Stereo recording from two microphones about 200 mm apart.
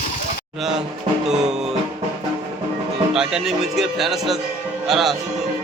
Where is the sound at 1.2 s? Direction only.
5° right (ahead or behind).